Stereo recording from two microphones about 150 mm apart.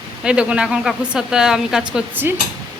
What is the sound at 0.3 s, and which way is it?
A woman's voice, 5° right (ahead or behind).